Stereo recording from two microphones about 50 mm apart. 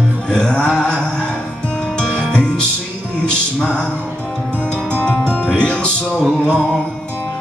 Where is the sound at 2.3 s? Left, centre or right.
Centre.